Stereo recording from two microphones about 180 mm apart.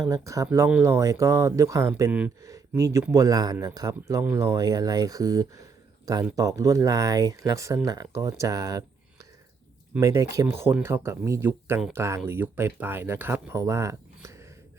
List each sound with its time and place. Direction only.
0.0 s speech: 20° right (ahead or behind)
10.0 s speech: 20° right (ahead or behind)